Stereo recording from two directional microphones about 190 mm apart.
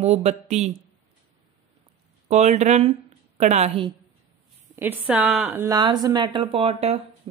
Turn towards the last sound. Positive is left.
turn(degrees=-30)  # may be behind; listen again after turning